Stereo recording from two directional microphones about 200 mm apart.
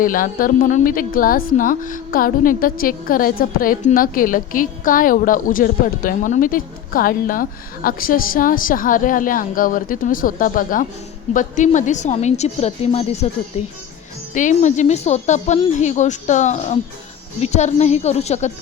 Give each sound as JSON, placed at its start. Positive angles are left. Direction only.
{"t": 0.0, "sound": "a woman's voice", "side_deg": 45}
{"t": 14.3, "sound": "speech", "side_deg": 35}